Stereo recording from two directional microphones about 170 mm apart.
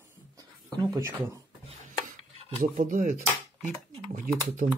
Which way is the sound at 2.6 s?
50° right (ahead or behind).